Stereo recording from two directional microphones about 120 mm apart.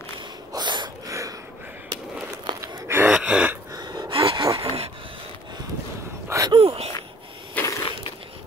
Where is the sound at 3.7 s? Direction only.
35° right (ahead or behind).